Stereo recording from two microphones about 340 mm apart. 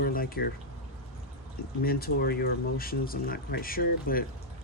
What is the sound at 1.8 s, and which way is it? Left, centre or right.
Speech, left.